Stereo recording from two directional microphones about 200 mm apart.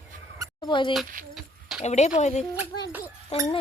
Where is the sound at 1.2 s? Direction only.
40° right (ahead or behind).